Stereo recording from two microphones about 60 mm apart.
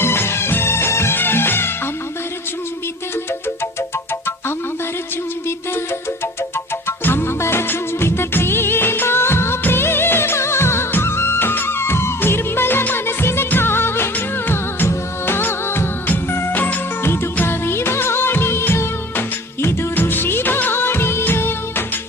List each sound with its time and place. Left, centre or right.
0.0 s music: left
6.8 s music: left
20.0 s music of bollywood: left